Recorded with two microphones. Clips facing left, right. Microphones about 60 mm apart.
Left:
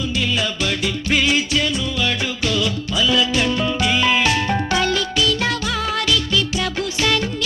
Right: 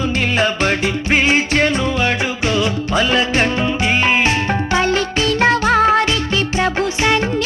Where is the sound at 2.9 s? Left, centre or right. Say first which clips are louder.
Right 2 dB; right.